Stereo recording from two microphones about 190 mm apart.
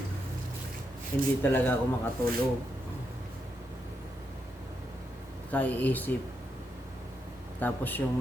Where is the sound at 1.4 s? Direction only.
10° left (ahead or behind).